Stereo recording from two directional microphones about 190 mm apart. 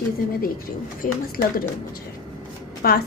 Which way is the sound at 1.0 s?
50° left (ahead or behind).